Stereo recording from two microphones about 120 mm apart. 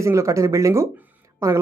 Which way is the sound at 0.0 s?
25° right (ahead or behind).